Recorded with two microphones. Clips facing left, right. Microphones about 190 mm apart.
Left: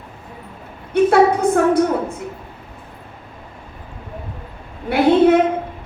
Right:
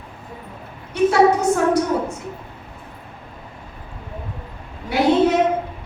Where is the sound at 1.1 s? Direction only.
55° left (ahead or behind).